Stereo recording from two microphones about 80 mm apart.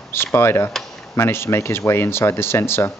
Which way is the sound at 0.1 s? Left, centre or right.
Left.